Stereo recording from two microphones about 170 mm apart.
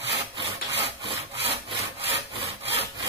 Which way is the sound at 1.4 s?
35° right (ahead or behind).